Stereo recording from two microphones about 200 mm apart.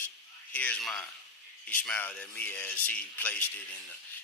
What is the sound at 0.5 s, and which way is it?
Speech, 5° left (ahead or behind).